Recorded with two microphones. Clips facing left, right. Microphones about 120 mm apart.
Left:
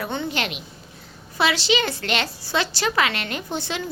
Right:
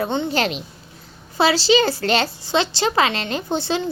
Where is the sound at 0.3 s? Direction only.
35° right (ahead or behind).